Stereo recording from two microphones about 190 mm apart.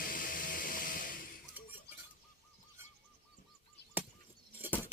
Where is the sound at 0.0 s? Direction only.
50° left (ahead or behind).